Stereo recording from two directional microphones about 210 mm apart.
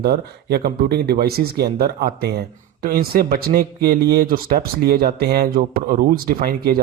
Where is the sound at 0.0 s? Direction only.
50° right (ahead or behind).